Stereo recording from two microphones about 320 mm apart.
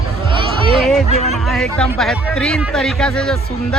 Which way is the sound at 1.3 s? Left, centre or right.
Centre.